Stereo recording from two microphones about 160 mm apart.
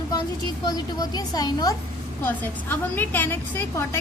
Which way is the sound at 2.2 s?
10° left (ahead or behind).